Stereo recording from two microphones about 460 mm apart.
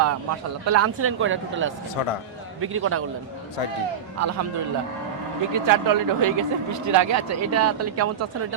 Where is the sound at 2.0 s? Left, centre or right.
Left.